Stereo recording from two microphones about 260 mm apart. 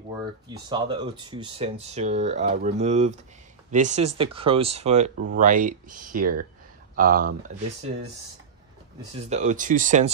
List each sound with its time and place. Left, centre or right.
0.2 s speech: centre; by 7.5 s right
9.2 s speech: right